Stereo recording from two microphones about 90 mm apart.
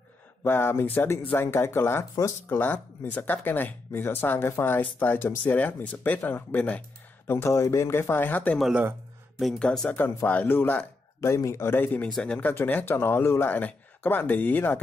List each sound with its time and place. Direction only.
0.4 s speech: 25° left (ahead or behind)
2.6 s speech: 20° left (ahead or behind)
7.2 s speech: 30° left (ahead or behind)
9.6 s speech: 10° left (ahead or behind)
11.1 s speech: 30° left (ahead or behind)